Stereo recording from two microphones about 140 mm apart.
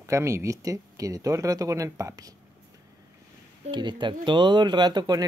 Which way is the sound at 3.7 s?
35° right (ahead or behind).